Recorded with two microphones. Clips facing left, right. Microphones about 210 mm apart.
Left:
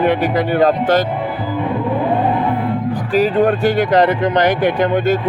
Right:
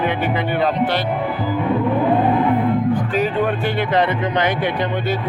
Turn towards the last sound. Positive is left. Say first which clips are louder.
# left 6 dB
turn(degrees=45)  # may be behind; listen again after turning